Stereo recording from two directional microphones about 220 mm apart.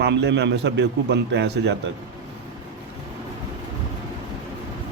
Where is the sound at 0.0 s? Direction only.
50° right (ahead or behind).